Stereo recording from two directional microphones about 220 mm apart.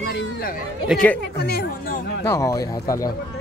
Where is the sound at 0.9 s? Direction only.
5° left (ahead or behind).